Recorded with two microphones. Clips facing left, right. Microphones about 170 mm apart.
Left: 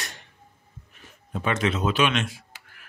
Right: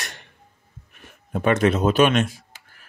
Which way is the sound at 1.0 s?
55° right (ahead or behind).